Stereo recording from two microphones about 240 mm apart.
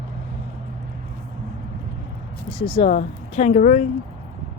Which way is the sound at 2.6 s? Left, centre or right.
Left.